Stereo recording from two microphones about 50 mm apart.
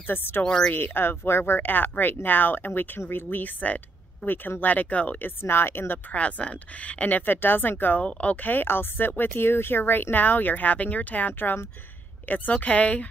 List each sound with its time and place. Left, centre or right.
0.0 s speech: left
0.4 s a woman's voice: centre
0.7 s speech: left
5.2 s speech: left
6.1 s speech: left
8.0 s a woman's voice: left
8.4 s a woman's voice: left